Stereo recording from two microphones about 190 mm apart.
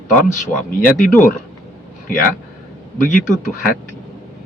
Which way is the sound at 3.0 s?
45° left (ahead or behind).